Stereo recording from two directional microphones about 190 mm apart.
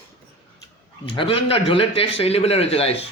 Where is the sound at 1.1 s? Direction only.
30° left (ahead or behind).